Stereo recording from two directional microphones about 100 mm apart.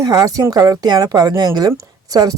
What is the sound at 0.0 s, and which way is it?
Speech, 35° right (ahead or behind).